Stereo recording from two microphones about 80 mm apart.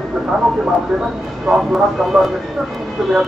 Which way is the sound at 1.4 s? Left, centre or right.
Centre.